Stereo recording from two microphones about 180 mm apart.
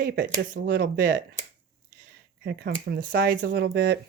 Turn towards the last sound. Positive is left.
turn(degrees=-65)  # may be behind; listen again after turning